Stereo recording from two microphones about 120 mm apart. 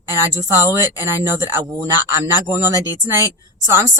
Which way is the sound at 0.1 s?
25° right (ahead or behind).